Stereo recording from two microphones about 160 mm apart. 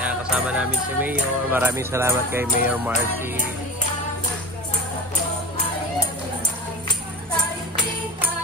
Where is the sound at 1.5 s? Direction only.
15° right (ahead or behind).